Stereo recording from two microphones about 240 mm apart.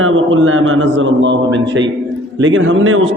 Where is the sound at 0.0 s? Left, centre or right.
Right.